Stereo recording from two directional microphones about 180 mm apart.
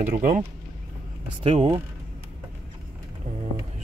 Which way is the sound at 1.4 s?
35° right (ahead or behind).